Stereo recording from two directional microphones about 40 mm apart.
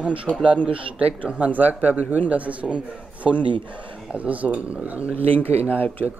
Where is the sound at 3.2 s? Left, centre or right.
Centre.